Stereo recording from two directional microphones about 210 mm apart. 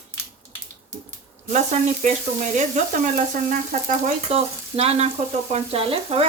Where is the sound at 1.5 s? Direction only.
35° right (ahead or behind).